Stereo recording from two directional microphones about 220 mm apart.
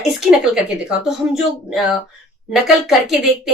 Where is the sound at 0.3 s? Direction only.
Centre (ahead or behind).